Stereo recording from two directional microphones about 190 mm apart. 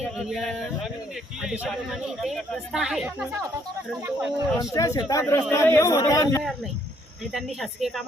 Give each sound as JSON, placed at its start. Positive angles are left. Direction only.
{"t": 0.2, "sound": "speech", "side_deg": 0}
{"t": 4.7, "sound": "speech", "side_deg": 15}
{"t": 7.3, "sound": "speech", "side_deg": 0}